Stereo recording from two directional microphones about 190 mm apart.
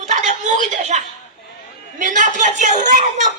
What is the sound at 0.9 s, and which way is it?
Speech, 40° right (ahead or behind).